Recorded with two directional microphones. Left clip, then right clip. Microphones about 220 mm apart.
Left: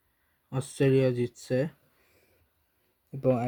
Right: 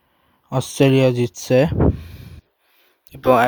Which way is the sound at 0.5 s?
35° right (ahead or behind).